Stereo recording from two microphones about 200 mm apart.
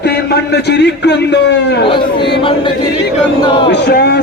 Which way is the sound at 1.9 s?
25° left (ahead or behind).